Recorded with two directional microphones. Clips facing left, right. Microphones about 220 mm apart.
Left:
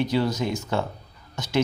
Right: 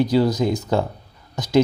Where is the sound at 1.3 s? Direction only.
35° right (ahead or behind).